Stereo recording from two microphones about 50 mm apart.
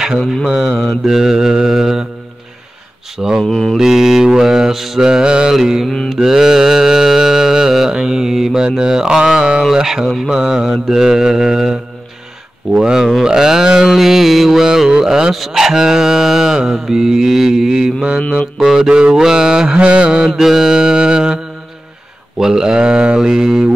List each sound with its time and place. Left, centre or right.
0.5 s mantra: centre
3.2 s mantra: centre
3.4 s mantra: centre
3.7 s mantra: centre
12.8 s mantra: centre
19.8 s mantra: right
22.4 s mantra: centre